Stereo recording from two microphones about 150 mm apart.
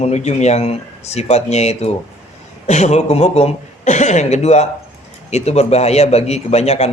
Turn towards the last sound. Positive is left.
turn(degrees=45)  # may be behind; listen again after turning